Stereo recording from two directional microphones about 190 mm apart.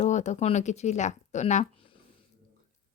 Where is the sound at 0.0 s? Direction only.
40° left (ahead or behind).